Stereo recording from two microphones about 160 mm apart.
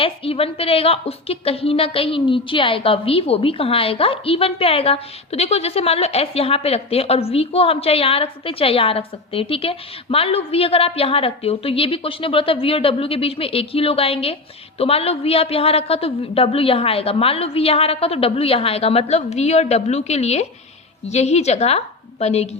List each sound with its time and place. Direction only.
0.0 s a woman's voice: 35° left (ahead or behind)